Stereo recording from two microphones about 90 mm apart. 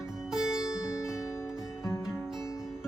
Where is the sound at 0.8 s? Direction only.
35° left (ahead or behind).